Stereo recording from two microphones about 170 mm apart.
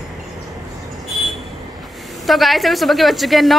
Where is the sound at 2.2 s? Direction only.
Centre (ahead or behind).